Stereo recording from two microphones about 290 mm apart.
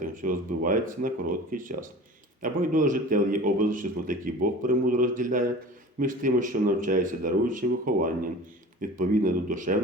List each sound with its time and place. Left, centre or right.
0.0 s speech: right